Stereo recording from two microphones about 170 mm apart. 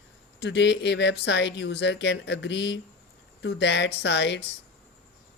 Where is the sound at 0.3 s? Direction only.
90° left.